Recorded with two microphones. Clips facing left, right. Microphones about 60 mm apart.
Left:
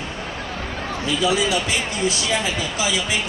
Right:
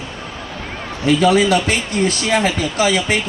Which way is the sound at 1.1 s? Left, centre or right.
Right.